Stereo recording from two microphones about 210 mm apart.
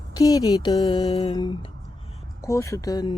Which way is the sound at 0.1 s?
15° left (ahead or behind).